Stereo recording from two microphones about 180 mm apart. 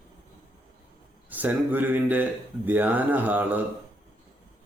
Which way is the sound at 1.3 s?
10° right (ahead or behind).